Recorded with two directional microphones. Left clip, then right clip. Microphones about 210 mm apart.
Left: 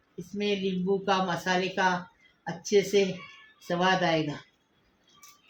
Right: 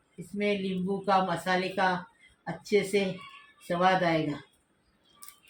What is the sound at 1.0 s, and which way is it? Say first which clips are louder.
Speech: right 4 dB; 25° left (ahead or behind).